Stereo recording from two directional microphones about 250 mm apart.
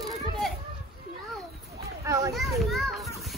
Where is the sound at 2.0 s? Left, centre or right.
Centre.